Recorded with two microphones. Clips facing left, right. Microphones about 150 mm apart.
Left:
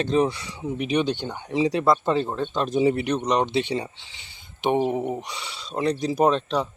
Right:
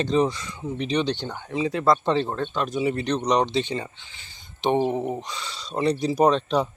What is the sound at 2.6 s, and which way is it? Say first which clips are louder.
Speech: left 5 dB; 30° left (ahead or behind).